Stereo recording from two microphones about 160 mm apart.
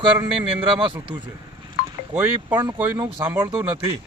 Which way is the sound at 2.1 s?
15° right (ahead or behind).